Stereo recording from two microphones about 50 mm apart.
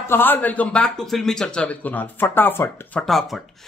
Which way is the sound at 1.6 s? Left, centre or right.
Left.